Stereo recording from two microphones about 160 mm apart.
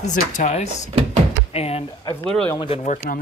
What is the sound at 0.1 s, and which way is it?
Speech, 50° left (ahead or behind).